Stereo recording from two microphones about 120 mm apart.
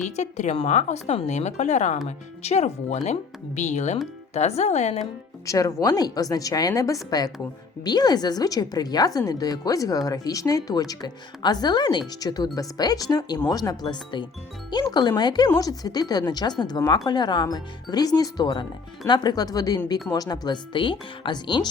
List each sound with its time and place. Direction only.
0.0 s speech: 80° left
2.0 s speech: 65° left (ahead or behind)
5.5 s speech: 30° left (ahead or behind)